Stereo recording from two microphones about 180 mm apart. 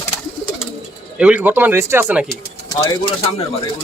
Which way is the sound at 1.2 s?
5° right (ahead or behind).